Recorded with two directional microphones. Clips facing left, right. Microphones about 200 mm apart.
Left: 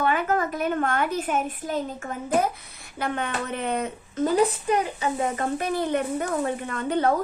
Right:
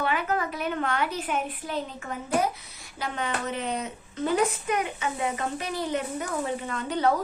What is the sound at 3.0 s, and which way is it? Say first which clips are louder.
A woman's voice: left 2 dB; 55° left (ahead or behind).